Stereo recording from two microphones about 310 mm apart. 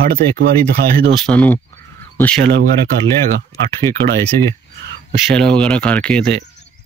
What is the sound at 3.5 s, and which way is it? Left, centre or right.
Speech, centre.